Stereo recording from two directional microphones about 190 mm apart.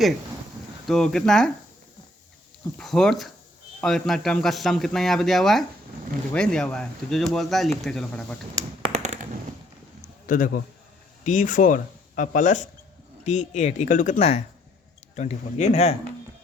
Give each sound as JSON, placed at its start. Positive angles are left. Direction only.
{"t": 0.9, "sound": "speech", "side_deg": 0}
{"t": 2.7, "sound": "speech", "side_deg": 5}
{"t": 8.5, "sound": "computer keyboard", "side_deg": -30}
{"t": 10.2, "sound": "a man's voice", "side_deg": 45}